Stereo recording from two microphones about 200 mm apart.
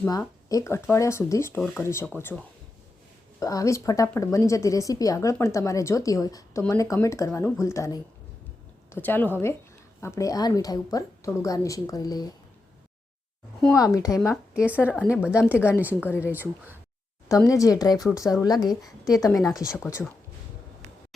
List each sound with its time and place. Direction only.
0.0 s speech: 15° left (ahead or behind)
3.4 s speech: 15° left (ahead or behind)
13.7 s speech: 15° left (ahead or behind)
14.5 s speech: 5° right (ahead or behind)
16.0 s speech: 10° left (ahead or behind)
16.3 s speech: 10° right (ahead or behind)
17.2 s speech: 15° left (ahead or behind)
19.4 s speech: centre (ahead or behind)